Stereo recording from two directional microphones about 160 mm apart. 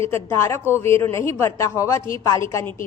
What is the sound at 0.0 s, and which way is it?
A woman's voice, 15° left (ahead or behind).